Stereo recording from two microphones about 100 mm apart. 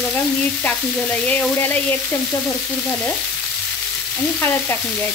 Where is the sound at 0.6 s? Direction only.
15° left (ahead or behind).